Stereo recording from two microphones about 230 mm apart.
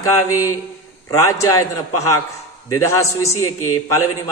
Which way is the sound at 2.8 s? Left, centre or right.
Centre.